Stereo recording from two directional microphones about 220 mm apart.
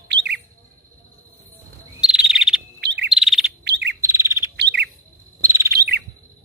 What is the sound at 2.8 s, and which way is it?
Chirp, 50° right (ahead or behind).